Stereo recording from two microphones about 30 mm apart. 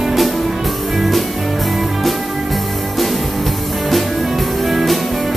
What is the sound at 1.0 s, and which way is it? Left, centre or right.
Music, centre.